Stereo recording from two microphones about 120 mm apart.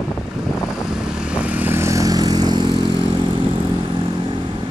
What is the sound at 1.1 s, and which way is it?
Vehicle, 5° right (ahead or behind).